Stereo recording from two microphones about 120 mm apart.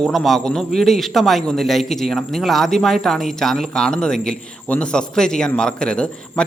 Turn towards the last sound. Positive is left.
turn(degrees=10)  # may be behind; listen again after turning